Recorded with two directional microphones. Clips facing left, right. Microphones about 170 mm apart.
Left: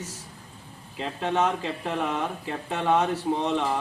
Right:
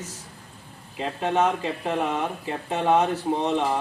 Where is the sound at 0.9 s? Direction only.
15° right (ahead or behind).